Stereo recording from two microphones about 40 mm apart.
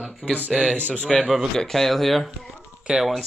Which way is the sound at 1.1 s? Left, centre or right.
Centre.